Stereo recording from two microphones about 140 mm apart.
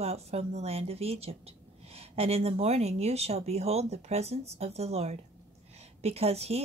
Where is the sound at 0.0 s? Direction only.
50° right (ahead or behind).